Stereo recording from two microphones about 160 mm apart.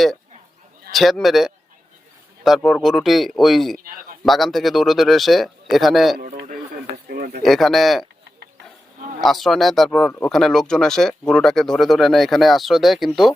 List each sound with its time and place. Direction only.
0.9 s speech: centre (ahead or behind)
6.1 s a sound: 65° right (ahead or behind)
7.4 s speech: centre (ahead or behind)
9.2 s speech: centre (ahead or behind)
10.1 s speech: 10° left (ahead or behind)
10.3 s speech: centre (ahead or behind)